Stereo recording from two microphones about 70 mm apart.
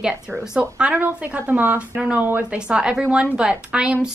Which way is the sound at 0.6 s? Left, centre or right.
Right.